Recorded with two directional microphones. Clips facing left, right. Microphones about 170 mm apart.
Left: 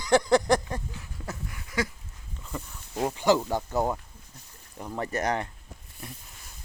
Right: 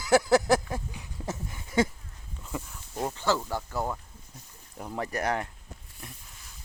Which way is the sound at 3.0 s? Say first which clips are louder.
Left 5 dB; 15° left (ahead or behind).